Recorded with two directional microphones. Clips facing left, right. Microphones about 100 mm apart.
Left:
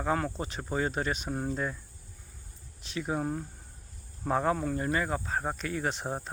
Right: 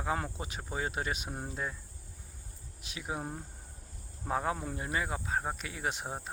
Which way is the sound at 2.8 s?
10° right (ahead or behind).